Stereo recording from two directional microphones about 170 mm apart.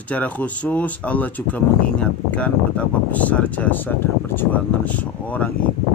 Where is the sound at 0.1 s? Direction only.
10° left (ahead or behind).